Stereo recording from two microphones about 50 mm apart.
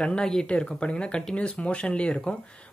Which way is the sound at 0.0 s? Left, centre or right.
Centre.